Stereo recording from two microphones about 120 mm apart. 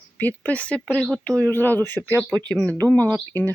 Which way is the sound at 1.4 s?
15° left (ahead or behind).